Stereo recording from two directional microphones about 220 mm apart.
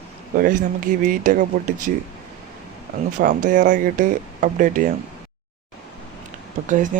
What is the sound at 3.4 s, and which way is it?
Speech, 35° right (ahead or behind).